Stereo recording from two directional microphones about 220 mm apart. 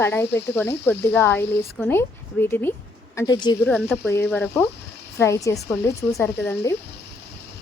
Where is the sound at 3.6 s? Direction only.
5° left (ahead or behind).